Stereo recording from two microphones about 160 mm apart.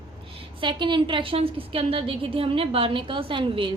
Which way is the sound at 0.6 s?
30° right (ahead or behind).